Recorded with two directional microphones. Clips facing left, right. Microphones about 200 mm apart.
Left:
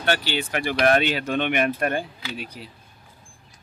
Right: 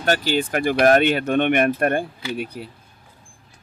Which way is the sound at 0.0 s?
40° right (ahead or behind).